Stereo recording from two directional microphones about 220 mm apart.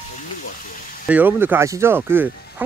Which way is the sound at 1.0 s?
5° right (ahead or behind).